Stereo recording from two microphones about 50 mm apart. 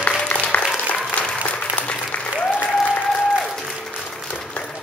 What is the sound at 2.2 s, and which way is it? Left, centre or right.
Applause, centre.